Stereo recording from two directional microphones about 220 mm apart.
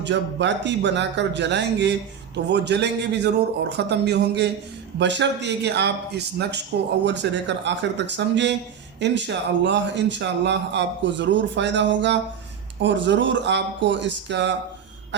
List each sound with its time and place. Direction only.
0.0 s speech: 55° right (ahead or behind)